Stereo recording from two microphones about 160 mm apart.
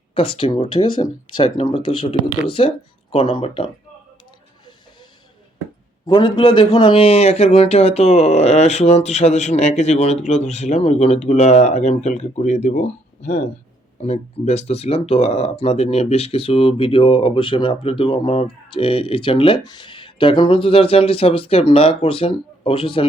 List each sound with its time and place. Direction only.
0.1 s speech: 35° left (ahead or behind)
6.1 s a man's voice: 30° left (ahead or behind)